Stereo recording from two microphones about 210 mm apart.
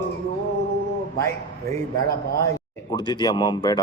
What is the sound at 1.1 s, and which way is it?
A man's voice, 15° left (ahead or behind).